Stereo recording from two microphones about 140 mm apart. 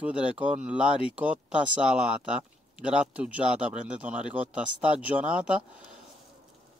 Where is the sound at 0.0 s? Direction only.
5° right (ahead or behind).